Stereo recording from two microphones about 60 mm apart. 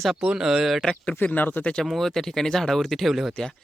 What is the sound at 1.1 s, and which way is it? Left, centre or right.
Speech, left.